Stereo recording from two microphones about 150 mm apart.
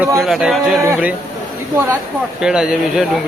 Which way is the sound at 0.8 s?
15° right (ahead or behind).